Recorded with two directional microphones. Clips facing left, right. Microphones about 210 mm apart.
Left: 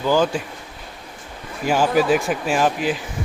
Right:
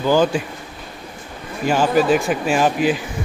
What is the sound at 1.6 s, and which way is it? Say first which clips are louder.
Speech: right 1 dB; 5° left (ahead or behind).